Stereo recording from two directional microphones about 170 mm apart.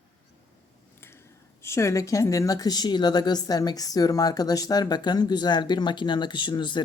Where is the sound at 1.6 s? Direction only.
15° left (ahead or behind).